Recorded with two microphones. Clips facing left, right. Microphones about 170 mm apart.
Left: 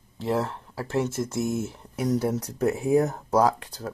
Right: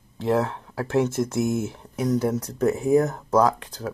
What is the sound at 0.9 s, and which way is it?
Speech, centre (ahead or behind).